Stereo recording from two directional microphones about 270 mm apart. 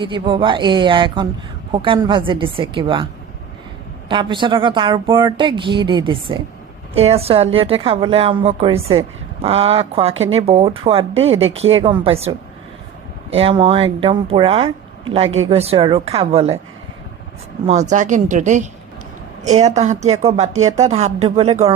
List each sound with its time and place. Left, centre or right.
0.0 s a woman's voice: centre
4.1 s a woman's voice: centre
17.7 s a woman's voice: right